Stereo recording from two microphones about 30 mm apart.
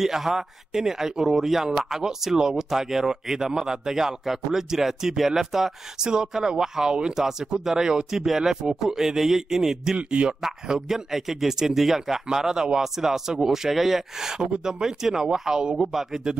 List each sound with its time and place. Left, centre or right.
0.0 s speech: centre
7.2 s speech: centre
9.9 s speech: right
10.7 s speech: centre